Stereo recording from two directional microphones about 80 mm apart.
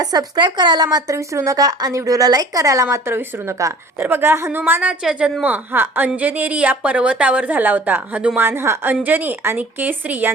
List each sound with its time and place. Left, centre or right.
0.0 s speech: right
1.1 s a woman's voice: right
4.0 s a woman's voice: right
5.7 s a woman's voice: right
8.4 s speech: right